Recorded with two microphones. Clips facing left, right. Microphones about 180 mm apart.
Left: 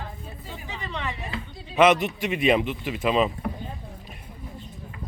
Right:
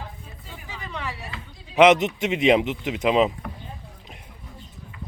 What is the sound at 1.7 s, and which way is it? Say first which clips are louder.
Speech: right 3 dB; 20° right (ahead or behind).